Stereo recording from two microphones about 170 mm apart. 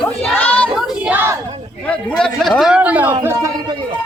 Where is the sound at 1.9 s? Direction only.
5° left (ahead or behind); by 3.5 s 15° right (ahead or behind).